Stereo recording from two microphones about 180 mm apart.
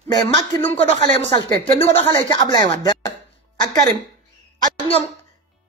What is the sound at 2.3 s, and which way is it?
Speech, 25° left (ahead or behind).